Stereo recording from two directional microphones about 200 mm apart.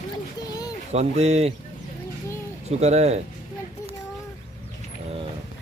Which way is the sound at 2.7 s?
30° right (ahead or behind).